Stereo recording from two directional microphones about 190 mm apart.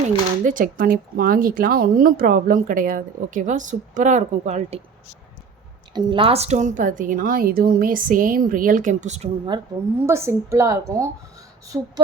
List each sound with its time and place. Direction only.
0.4 s a woman's voice: 45° right (ahead or behind)
5.9 s a woman's voice: 25° right (ahead or behind)
9.5 s a woman's voice: 25° right (ahead or behind)